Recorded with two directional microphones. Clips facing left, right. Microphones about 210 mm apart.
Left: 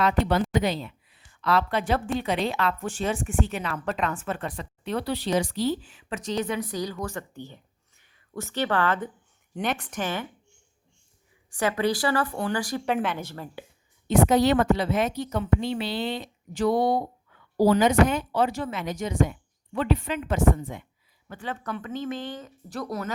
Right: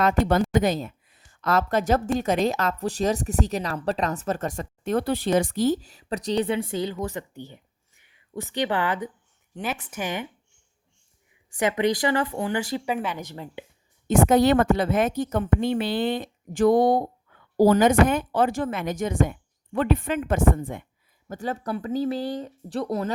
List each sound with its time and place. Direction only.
0.0 s a woman's voice: 45° right (ahead or behind); by 9.0 s 15° right (ahead or behind)
9.6 s a woman's voice: 5° right (ahead or behind)
11.5 s a woman's voice: 20° right (ahead or behind)
14.1 s speech: 50° right (ahead or behind)
21.2 s a woman's voice: 40° right (ahead or behind)